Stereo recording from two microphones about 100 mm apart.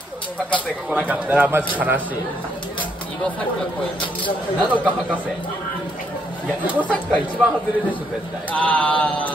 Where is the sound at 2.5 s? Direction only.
55° left (ahead or behind).